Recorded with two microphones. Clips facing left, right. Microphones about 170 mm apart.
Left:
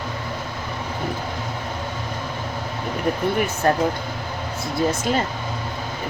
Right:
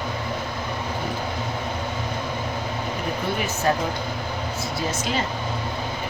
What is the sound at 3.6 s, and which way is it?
Speech, 55° left (ahead or behind).